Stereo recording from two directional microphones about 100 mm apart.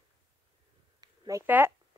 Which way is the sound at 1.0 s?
40° right (ahead or behind).